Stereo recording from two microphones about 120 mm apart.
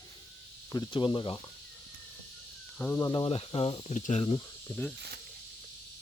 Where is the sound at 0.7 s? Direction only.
40° left (ahead or behind).